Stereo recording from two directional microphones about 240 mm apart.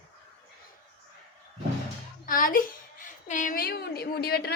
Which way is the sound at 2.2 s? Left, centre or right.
Left.